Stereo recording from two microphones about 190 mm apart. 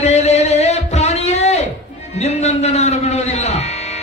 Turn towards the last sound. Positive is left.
turn(degrees=35)  # may be behind; listen again after turning